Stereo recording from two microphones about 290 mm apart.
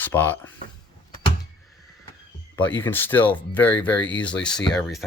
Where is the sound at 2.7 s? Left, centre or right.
Centre.